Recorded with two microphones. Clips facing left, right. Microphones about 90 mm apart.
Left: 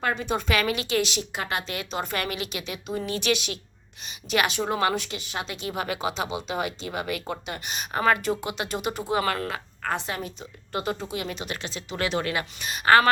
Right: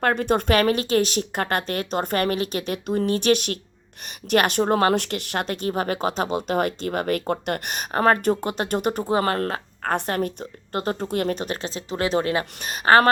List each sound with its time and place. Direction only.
0.0 s speech: 60° right (ahead or behind)
9.1 s speech: 35° right (ahead or behind)
9.4 s speech: 45° right (ahead or behind)